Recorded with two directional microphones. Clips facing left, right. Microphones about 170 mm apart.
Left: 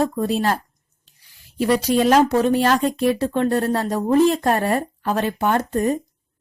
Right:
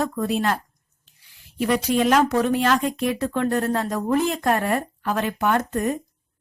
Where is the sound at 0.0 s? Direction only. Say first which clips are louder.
Left 3 dB; 30° left (ahead or behind).